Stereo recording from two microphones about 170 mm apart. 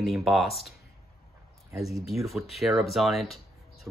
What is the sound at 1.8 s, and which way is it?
Speech, centre (ahead or behind).